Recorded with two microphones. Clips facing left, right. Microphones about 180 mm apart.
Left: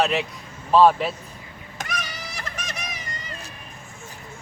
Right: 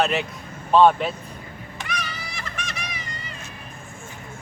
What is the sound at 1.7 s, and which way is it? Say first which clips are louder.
Children playing: even; 40° left (ahead or behind).